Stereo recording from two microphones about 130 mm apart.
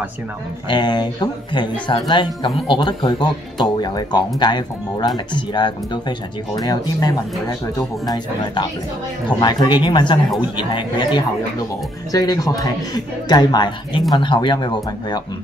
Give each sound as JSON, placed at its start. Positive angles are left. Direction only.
{"t": 0.7, "sound": "speech", "side_deg": 35}
{"t": 9.4, "sound": "speech", "side_deg": 35}